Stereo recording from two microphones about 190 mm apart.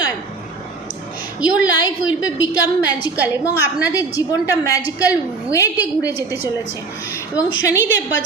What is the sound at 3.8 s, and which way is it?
A woman's voice, 20° left (ahead or behind).